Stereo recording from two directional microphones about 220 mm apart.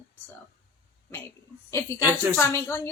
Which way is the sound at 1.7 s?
10° left (ahead or behind).